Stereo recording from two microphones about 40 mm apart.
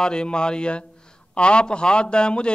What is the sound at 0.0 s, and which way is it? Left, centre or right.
A man's voice, left.